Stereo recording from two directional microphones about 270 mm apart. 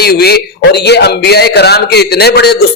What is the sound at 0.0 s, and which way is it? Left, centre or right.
Speech, left.